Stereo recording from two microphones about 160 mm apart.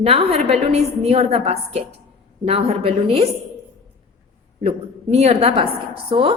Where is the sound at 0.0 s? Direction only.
40° right (ahead or behind).